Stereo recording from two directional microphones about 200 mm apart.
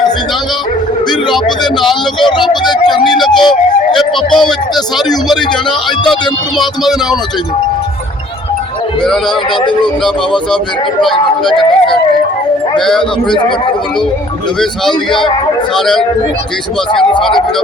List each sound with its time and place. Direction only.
2.6 s music: 20° left (ahead or behind)
3.0 s music: centre (ahead or behind)
6.6 s speech: centre (ahead or behind)
9.8 s speech: 5° left (ahead or behind)
14.6 s speech: centre (ahead or behind)